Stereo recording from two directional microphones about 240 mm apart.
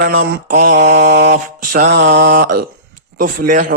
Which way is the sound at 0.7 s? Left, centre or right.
Right.